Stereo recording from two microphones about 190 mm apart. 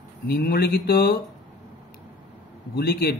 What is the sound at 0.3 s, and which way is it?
Speech, 55° left (ahead or behind).